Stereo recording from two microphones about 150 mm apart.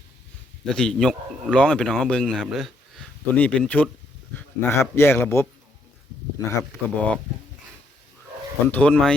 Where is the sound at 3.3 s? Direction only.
10° left (ahead or behind).